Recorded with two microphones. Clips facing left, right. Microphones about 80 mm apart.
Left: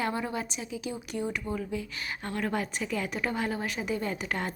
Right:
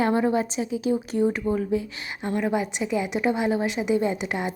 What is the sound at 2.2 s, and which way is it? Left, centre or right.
A woman's voice, centre.